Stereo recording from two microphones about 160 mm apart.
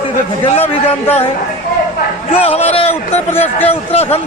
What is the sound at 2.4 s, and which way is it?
Speech, 40° left (ahead or behind).